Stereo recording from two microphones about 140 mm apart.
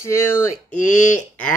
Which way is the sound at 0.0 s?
20° left (ahead or behind).